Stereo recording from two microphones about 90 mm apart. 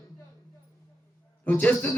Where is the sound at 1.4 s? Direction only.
15° left (ahead or behind).